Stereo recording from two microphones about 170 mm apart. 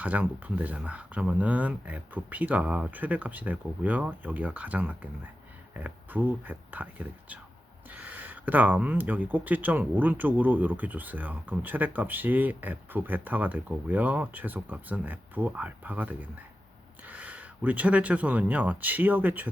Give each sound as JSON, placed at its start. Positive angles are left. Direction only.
{"t": 0.0, "sound": "speech", "side_deg": -10}